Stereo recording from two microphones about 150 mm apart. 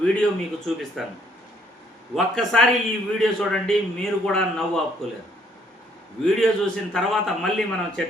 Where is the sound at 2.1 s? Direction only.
Centre (ahead or behind).